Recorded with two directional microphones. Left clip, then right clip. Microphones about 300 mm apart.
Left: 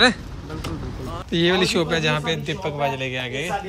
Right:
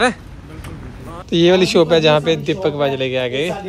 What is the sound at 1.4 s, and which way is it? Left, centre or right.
A man's voice, right.